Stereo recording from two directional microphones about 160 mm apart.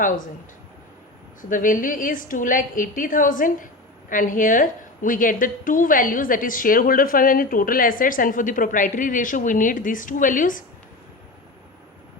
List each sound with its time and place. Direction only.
0.0 s a woman's voice: 55° left (ahead or behind)
1.4 s a woman's voice: 55° left (ahead or behind)